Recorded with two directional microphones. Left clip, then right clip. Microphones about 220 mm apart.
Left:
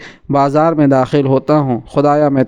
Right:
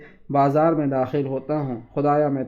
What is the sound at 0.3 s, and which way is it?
Speech, 40° left (ahead or behind).